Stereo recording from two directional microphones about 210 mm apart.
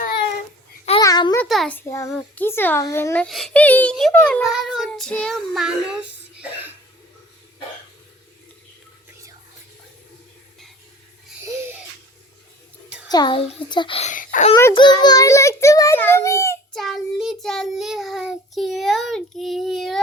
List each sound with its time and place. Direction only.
1.0 s a sound: 15° left (ahead or behind)
1.4 s a sound: 5° left (ahead or behind)
2.0 s a child's voice: 5° left (ahead or behind)
13.1 s a child's voice: 20° left (ahead or behind); by 14.5 s 40° left (ahead or behind)
14.5 s a child's voice: 15° left (ahead or behind)
16.7 s child singing: centre (ahead or behind)